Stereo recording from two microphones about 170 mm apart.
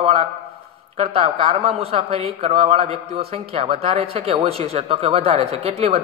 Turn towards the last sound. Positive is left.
turn(degrees=-35)  # may be behind; listen again after turning